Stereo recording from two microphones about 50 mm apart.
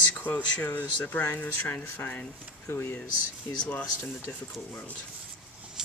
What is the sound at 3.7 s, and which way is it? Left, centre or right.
Speech, left.